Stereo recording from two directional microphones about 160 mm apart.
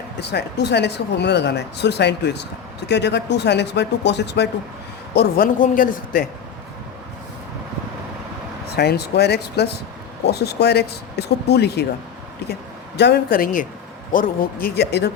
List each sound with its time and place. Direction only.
0.2 s speech: 90° left
5.1 s a man's voice: 70° left (ahead or behind)
5.6 s speech: 55° left (ahead or behind)
8.7 s speech: 85° left
13.0 s speech: 90° left